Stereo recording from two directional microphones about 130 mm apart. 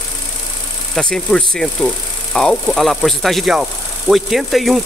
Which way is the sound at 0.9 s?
5° left (ahead or behind).